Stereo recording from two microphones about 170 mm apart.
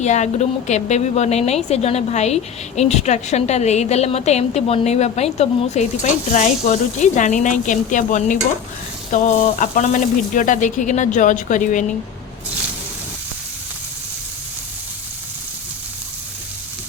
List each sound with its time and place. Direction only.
0.0 s a woman's voice: 45° left (ahead or behind)